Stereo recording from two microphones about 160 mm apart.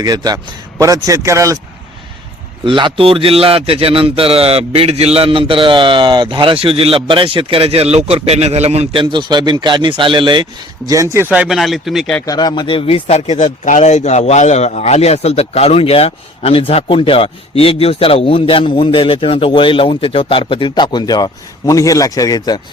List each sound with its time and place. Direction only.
0.0 s speech: 25° right (ahead or behind)
2.6 s a man's voice: 30° right (ahead or behind); by 12.2 s centre (ahead or behind)
12.2 s speech: 25° left (ahead or behind)